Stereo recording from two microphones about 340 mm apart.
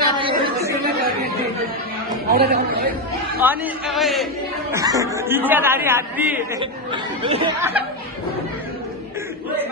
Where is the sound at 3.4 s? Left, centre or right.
Centre.